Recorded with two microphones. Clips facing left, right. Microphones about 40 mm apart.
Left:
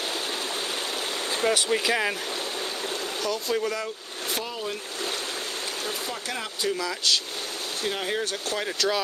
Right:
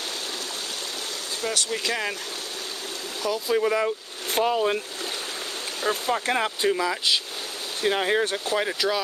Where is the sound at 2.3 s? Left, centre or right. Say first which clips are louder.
Left 3 dB; left.